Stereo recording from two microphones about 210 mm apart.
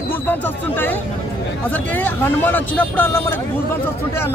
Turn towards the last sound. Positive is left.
turn(degrees=10)  # may be behind; listen again after turning